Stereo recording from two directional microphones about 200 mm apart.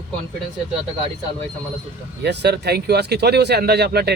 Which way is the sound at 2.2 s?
55° right (ahead or behind).